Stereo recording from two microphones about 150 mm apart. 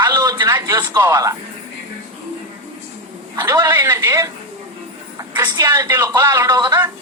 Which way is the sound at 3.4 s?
20° right (ahead or behind).